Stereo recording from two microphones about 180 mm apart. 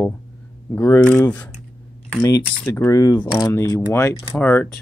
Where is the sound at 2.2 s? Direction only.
20° left (ahead or behind).